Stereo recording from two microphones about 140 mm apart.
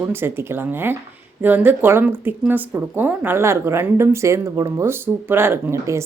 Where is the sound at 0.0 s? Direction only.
15° right (ahead or behind).